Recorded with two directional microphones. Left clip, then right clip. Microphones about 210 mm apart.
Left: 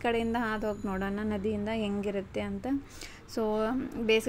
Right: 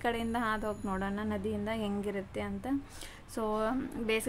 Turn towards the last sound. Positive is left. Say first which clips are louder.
# left 5 dB
turn(degrees=5)  # may be behind; listen again after turning